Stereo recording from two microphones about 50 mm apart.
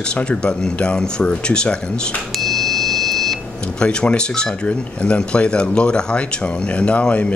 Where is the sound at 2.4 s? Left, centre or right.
Centre.